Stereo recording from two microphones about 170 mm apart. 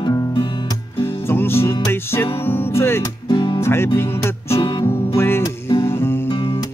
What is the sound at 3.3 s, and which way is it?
Music, 30° left (ahead or behind).